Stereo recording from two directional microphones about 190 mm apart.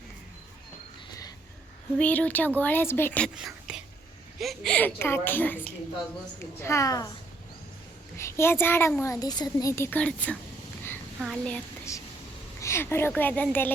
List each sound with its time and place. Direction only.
2.0 s a child's voice: 10° left (ahead or behind)
3.3 s a child's voice: 5° right (ahead or behind); by 7.1 s 20° left (ahead or behind)
8.1 s a child's voice: 15° left (ahead or behind)